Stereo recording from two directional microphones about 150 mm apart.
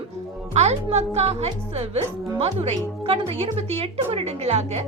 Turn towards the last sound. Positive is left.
turn(degrees=-45)  # may be behind; listen again after turning